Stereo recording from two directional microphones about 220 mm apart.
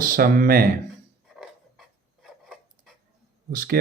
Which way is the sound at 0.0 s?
40° right (ahead or behind).